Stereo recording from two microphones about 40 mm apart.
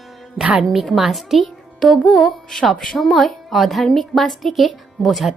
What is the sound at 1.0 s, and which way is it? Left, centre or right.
Speech, centre.